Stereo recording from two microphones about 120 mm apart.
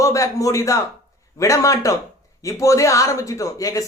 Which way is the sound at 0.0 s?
25° left (ahead or behind).